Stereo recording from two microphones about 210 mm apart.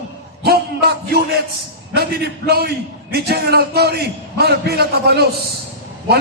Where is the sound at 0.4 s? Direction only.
50° right (ahead or behind).